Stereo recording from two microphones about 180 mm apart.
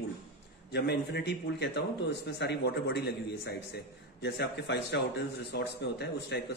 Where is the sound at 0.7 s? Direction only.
65° left (ahead or behind).